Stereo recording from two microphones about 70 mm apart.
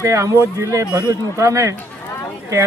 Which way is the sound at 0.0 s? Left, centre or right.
Right.